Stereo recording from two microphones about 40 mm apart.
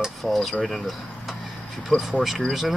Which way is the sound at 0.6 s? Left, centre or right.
Centre.